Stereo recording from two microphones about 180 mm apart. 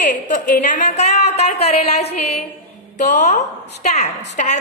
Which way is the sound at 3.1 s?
40° left (ahead or behind).